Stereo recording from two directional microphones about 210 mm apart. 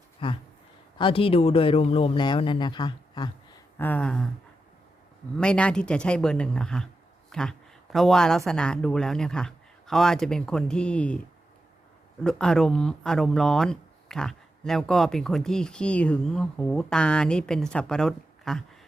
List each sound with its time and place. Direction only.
0.2 s speech: 25° left (ahead or behind)
3.8 s speech: 10° left (ahead or behind)
5.4 s speech: 5° left (ahead or behind)
12.2 s speech: 5° left (ahead or behind)